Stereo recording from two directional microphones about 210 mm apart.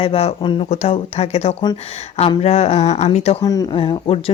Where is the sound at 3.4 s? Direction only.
20° left (ahead or behind).